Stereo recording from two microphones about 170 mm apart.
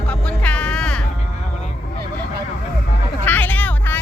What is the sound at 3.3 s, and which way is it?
Vehicle, 10° left (ahead or behind).